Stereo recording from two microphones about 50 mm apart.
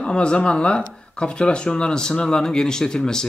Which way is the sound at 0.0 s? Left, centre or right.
Centre.